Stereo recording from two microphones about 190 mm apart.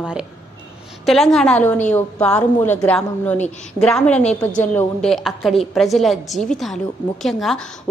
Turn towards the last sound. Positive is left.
turn(degrees=0)  # may be behind; listen again after turning